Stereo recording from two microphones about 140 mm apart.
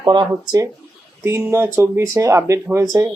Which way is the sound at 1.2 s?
20° right (ahead or behind).